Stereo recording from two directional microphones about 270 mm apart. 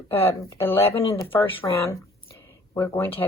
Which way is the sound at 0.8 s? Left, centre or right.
Left.